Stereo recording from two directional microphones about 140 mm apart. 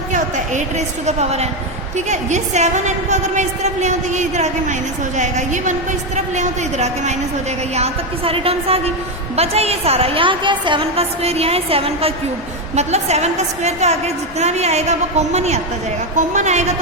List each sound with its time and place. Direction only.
0.1 s a woman's voice: 60° right (ahead or behind)